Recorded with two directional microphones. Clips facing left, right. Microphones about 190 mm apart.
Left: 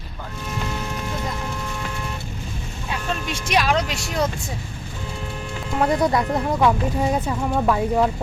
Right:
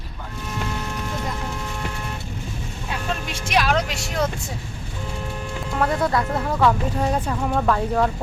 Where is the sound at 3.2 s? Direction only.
Centre (ahead or behind).